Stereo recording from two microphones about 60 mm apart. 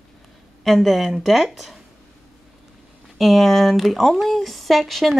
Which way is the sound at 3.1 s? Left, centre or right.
Centre.